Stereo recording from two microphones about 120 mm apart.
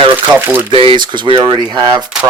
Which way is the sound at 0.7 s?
45° right (ahead or behind).